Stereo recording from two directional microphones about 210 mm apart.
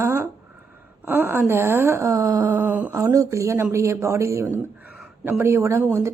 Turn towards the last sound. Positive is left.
turn(degrees=-15)  # may be behind; listen again after turning